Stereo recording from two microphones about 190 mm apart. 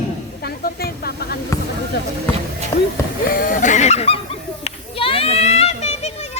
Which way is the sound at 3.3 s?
45° left (ahead or behind).